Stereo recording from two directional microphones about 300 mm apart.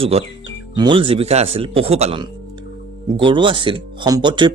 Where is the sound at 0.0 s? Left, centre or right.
Centre.